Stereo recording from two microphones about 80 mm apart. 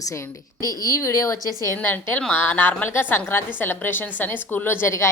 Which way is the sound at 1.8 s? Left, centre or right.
Left.